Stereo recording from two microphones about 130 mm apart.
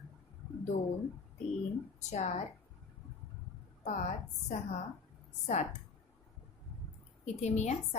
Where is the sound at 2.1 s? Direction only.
60° left (ahead or behind).